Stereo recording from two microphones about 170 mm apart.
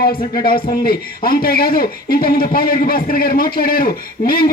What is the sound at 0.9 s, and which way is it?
Speech, 60° left (ahead or behind).